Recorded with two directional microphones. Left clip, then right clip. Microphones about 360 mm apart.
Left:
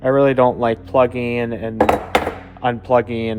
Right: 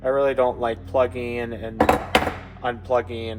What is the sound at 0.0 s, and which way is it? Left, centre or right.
Speech, centre.